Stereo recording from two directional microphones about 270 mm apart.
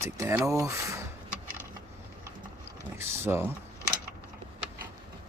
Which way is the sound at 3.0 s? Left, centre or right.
Centre.